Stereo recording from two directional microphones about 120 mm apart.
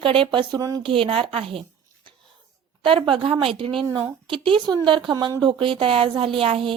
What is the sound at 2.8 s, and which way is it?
Speech, 45° right (ahead or behind).